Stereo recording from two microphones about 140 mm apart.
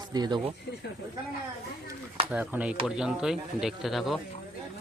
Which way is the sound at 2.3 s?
10° right (ahead or behind).